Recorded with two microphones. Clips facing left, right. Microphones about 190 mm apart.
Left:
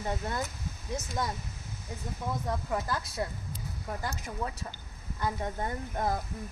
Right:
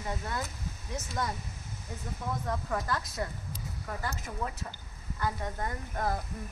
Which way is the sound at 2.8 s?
10° left (ahead or behind).